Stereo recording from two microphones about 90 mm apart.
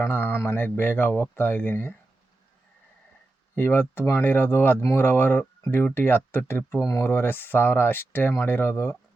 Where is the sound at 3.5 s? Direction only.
25° left (ahead or behind).